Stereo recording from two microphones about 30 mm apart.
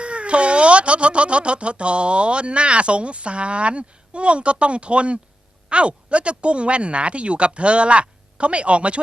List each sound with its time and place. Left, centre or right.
0.0 s speech: right